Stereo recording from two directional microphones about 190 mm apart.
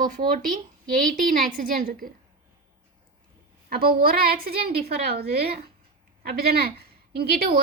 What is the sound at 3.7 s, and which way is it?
A woman's voice, 50° right (ahead or behind).